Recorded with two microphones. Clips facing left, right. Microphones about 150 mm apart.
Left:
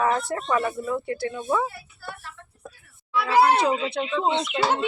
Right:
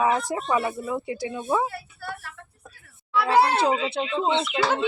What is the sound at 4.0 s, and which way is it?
Speech, 25° right (ahead or behind).